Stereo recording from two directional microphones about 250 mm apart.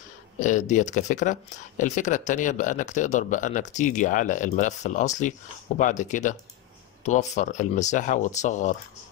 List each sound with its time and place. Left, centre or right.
0.4 s speech: left